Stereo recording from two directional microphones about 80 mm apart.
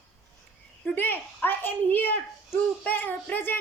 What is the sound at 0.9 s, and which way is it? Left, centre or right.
A woman's voice, left.